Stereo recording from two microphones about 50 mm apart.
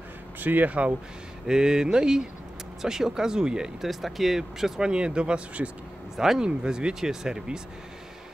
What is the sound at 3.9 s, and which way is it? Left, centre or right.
A man's voice, centre.